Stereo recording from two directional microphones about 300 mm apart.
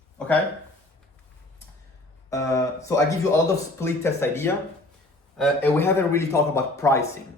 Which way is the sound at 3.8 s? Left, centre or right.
Centre.